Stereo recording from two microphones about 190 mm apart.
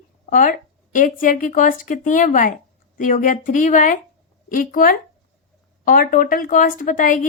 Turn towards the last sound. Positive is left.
turn(degrees=45)  # may be behind; listen again after turning